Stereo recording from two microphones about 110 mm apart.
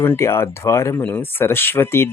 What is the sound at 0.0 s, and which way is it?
Speech, 20° left (ahead or behind).